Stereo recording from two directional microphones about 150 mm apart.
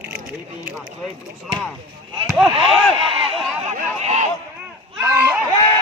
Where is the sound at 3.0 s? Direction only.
35° right (ahead or behind).